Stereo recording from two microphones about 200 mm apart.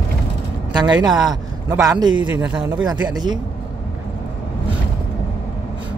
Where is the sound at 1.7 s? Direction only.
15° right (ahead or behind).